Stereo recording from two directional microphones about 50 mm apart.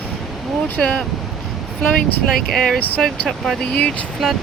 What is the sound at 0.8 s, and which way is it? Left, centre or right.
Speech, centre.